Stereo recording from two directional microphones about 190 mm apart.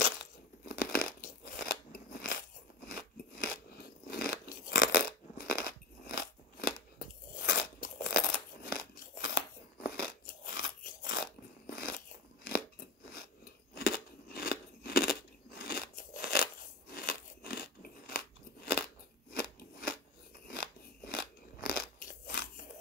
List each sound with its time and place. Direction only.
0.7 s a sound: 50° left (ahead or behind)
1.2 s crunch: 50° left (ahead or behind)
13.7 s crunch: 50° left (ahead or behind)
19.3 s scissors: 50° left (ahead or behind)
20.4 s crunch: 55° left (ahead or behind)